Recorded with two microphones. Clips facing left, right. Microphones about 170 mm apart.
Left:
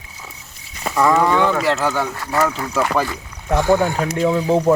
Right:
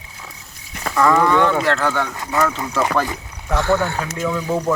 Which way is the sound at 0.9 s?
10° left (ahead or behind).